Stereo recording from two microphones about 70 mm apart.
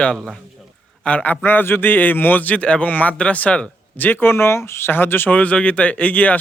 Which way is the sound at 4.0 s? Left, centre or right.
Left.